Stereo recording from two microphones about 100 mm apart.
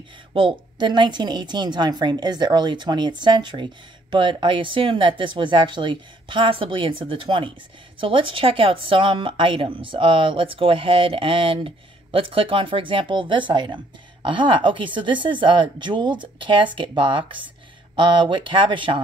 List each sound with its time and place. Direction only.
0.3 s a woman's voice: 55° right (ahead or behind)